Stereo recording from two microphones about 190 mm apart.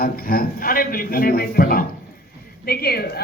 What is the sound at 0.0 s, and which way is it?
A man's voice, 50° left (ahead or behind).